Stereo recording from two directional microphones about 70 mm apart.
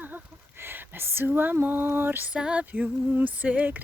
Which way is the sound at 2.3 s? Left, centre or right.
Centre.